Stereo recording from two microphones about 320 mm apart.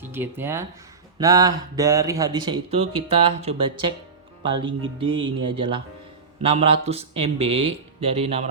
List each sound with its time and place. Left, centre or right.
0.0 s speech: centre